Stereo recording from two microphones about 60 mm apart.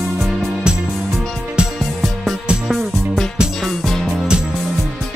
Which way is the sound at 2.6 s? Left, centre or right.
Centre.